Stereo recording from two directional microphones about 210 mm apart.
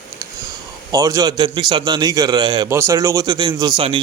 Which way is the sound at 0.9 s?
15° right (ahead or behind).